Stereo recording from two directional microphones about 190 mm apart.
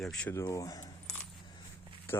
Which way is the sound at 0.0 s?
5° left (ahead or behind).